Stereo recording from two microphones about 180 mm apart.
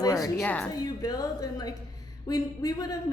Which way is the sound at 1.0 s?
20° left (ahead or behind).